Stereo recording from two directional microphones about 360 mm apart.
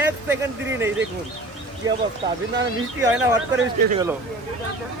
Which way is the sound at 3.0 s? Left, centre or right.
Centre.